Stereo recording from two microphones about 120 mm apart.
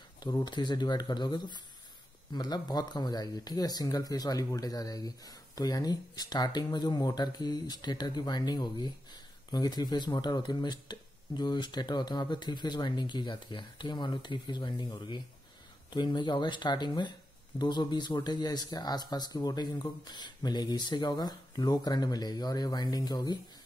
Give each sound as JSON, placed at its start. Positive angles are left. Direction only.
{"t": 0.2, "sound": "speech", "side_deg": 35}